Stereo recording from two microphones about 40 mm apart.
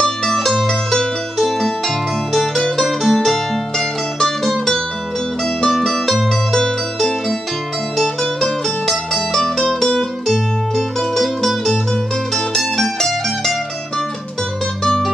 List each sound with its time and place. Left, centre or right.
0.0 s music: centre
2.3 s music: centre
3.0 s music: centre
14.8 s music: centre